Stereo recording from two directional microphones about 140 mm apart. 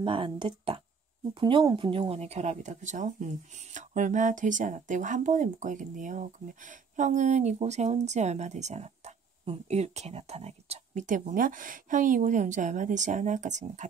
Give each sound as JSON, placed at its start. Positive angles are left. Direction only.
{"t": 0.0, "sound": "speech", "side_deg": -35}